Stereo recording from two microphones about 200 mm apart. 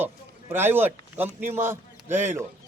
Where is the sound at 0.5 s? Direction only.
10° right (ahead or behind).